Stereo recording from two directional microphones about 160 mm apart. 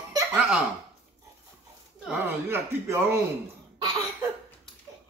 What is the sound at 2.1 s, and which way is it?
Speech, 15° right (ahead or behind).